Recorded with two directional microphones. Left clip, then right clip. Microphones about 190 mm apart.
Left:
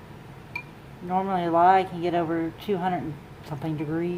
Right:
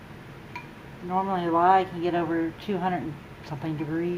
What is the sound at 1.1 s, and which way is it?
Speech, 20° left (ahead or behind).